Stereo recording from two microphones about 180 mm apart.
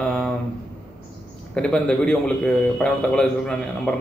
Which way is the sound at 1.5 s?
5° left (ahead or behind).